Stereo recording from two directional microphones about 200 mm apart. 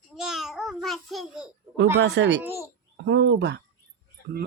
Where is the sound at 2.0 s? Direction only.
60° right (ahead or behind).